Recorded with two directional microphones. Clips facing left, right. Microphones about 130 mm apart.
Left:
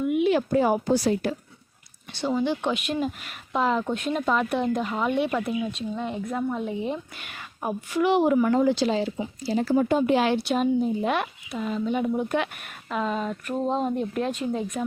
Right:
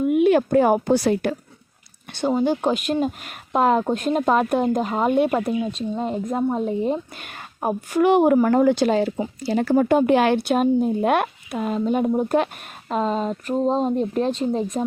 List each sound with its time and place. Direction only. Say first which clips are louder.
0.0 s speech: right 5 dB; 50° right (ahead or behind)
2.3 s speech: right 4 dB; 40° right (ahead or behind)
9.4 s speech: right 3 dB; 65° right (ahead or behind); by 14.8 s 35° right (ahead or behind)